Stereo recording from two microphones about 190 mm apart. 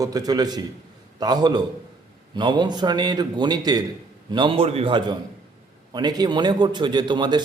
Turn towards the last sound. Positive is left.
turn(degrees=-25)  # may be behind; listen again after turning